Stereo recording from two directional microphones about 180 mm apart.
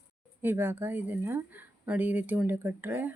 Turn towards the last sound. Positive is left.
turn(degrees=-10)  # may be behind; listen again after turning